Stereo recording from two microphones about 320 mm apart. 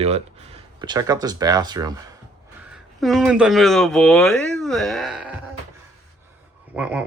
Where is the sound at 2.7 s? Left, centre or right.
Centre.